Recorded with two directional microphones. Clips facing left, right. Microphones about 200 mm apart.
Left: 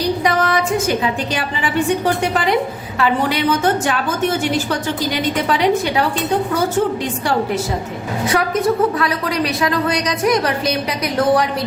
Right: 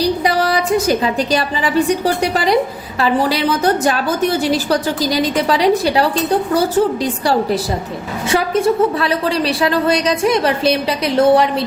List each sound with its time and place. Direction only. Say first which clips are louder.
0.0 s a woman's voice: right 2 dB; 35° right (ahead or behind)